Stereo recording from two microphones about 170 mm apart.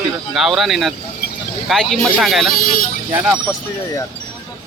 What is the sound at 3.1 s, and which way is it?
Speech, 10° right (ahead or behind).